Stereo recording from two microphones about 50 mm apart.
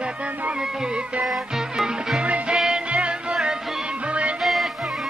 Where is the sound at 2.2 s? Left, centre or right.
Right.